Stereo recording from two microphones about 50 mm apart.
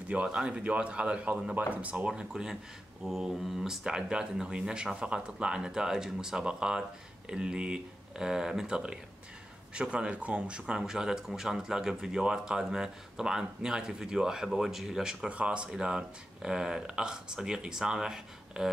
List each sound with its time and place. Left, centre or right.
0.1 s speech: right
2.0 s speech: centre
10.8 s speech: centre
15.2 s speech: right